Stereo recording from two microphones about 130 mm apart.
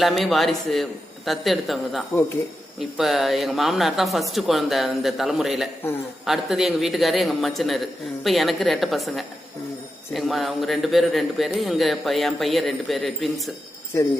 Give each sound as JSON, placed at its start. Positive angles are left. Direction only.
{"t": 0.0, "sound": "a man's voice", "side_deg": 0}
{"t": 13.9, "sound": "speech", "side_deg": 20}